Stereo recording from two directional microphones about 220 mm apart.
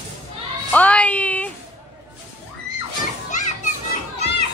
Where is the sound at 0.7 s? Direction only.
5° left (ahead or behind).